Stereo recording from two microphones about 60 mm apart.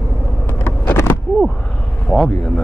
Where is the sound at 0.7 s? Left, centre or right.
Left.